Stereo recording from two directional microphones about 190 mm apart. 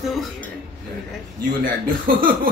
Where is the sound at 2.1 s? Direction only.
50° right (ahead or behind).